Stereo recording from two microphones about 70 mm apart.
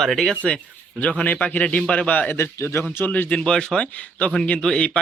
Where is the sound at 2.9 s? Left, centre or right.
Left.